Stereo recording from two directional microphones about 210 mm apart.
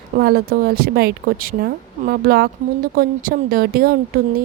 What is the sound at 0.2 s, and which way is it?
A woman's voice, 50° right (ahead or behind).